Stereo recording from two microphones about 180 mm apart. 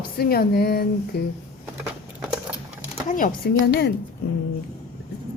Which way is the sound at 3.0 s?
50° left (ahead or behind).